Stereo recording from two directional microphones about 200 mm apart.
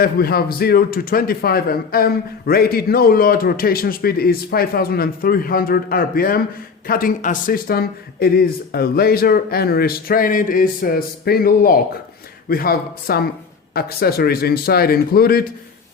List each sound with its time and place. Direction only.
0.0 s a man's voice: 50° left (ahead or behind)